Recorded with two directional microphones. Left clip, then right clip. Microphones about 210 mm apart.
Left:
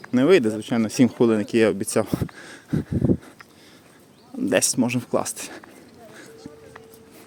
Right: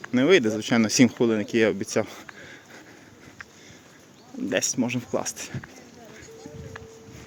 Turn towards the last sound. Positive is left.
turn(degrees=20)  # may be behind; listen again after turning